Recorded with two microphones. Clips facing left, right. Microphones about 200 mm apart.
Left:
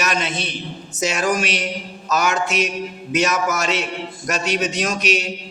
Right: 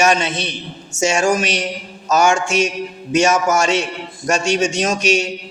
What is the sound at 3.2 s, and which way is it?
A man's voice, 30° right (ahead or behind).